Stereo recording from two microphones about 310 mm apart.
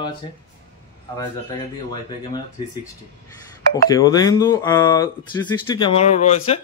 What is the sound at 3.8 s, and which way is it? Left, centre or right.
Speech, centre.